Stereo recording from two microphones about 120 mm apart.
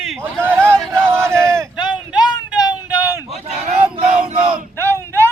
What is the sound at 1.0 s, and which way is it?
Battle cry, 20° right (ahead or behind).